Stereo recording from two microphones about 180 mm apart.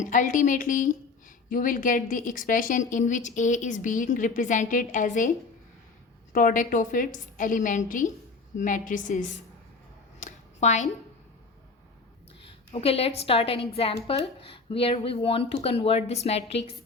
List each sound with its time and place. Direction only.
0.0 s a woman's voice: 45° left (ahead or behind)
6.3 s a woman's voice: 50° left (ahead or behind)
10.2 s a sound: 40° left (ahead or behind)
12.4 s a woman's voice: 30° left (ahead or behind)